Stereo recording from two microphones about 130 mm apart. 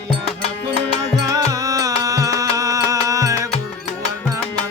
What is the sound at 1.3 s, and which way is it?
Music, 25° right (ahead or behind).